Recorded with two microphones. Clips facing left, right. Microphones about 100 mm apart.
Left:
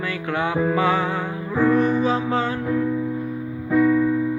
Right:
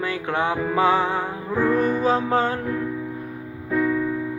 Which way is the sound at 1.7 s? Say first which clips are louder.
Even; 40° right (ahead or behind).